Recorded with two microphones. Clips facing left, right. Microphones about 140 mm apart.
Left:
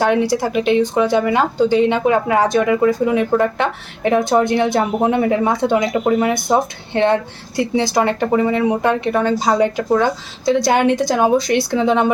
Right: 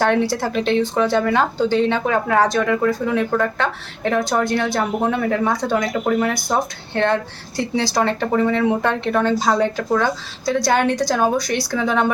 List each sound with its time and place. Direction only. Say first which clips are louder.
0.0 s speech: left 2 dB; 10° left (ahead or behind)